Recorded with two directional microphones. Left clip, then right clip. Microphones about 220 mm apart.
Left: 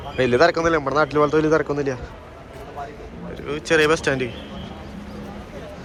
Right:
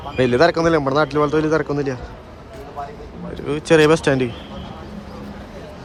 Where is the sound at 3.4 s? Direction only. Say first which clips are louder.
Right 4 dB; 20° right (ahead or behind).